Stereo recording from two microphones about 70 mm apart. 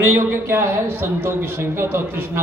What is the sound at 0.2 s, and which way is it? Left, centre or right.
A man's voice, right.